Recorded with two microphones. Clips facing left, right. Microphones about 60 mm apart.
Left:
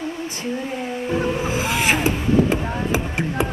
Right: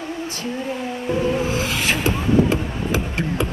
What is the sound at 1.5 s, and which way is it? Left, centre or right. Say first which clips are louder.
Music: left 2 dB; left.